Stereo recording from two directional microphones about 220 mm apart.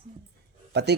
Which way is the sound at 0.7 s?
50° right (ahead or behind).